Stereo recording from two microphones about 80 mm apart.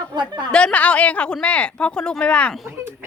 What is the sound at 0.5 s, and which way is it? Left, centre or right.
A woman's voice, centre.